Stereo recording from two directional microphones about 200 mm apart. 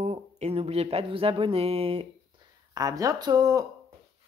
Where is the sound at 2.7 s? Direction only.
15° right (ahead or behind).